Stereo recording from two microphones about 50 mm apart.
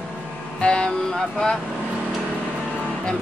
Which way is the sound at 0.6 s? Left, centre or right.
Centre.